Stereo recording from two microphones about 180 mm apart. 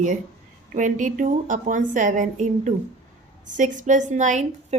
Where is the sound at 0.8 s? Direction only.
45° right (ahead or behind).